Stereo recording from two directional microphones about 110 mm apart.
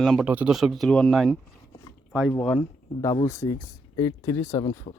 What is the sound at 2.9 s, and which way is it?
Speech, 30° left (ahead or behind).